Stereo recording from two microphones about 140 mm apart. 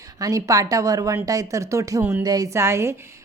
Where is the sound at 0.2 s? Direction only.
25° right (ahead or behind).